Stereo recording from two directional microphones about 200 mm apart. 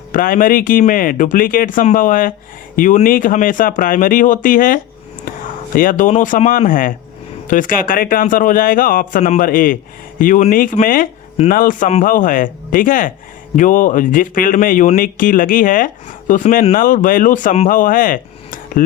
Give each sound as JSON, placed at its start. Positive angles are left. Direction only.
{"t": 0.1, "sound": "speech", "side_deg": 45}